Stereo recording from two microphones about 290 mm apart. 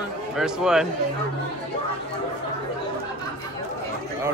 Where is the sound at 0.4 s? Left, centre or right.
Centre.